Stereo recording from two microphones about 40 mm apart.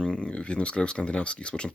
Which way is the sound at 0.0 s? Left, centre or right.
Left.